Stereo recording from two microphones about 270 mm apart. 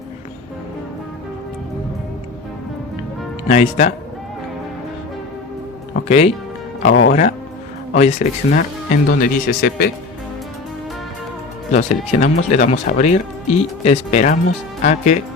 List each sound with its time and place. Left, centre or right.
3.5 s speech: left
6.1 s speech: left
11.7 s speech: left